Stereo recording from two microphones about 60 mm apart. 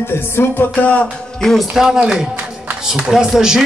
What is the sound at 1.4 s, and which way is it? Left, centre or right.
Speech, centre.